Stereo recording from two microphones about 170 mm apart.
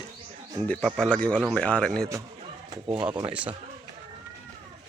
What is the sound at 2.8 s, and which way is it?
Speech, 25° right (ahead or behind).